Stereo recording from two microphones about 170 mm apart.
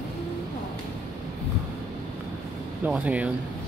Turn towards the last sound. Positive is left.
turn(degrees=-10)  # may be behind; listen again after turning